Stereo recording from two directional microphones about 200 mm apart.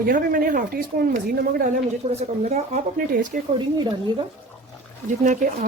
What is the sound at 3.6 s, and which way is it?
Speech, 20° right (ahead or behind).